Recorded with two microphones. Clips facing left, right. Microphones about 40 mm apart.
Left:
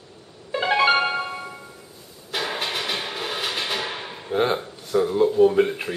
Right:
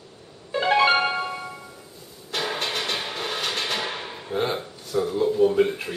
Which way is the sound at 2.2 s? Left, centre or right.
Centre.